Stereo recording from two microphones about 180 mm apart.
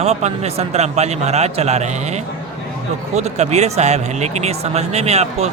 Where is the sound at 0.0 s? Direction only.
35° right (ahead or behind).